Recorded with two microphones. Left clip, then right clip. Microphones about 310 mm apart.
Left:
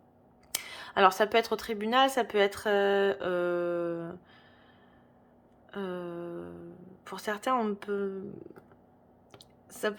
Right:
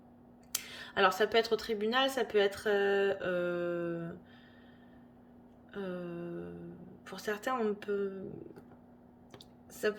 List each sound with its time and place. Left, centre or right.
0.5 s speech: centre
5.7 s speech: centre
9.7 s speech: centre